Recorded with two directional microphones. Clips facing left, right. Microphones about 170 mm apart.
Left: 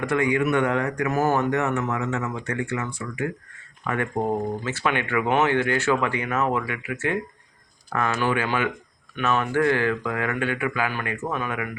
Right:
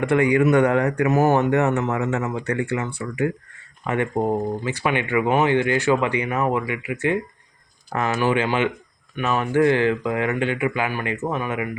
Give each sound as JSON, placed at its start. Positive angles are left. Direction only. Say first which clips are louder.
{"t": 0.0, "sound": "a man's voice", "louder": "right 5 dB", "side_deg": -30}
{"t": 1.0, "sound": "speech", "louder": "right 4 dB", "side_deg": -20}
{"t": 1.5, "sound": "a man's voice", "louder": "right 4 dB", "side_deg": -35}
{"t": 3.8, "sound": "speech", "louder": "right 3 dB", "side_deg": -20}